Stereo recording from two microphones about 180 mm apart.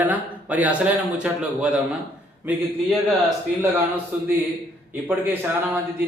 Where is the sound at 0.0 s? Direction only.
10° right (ahead or behind).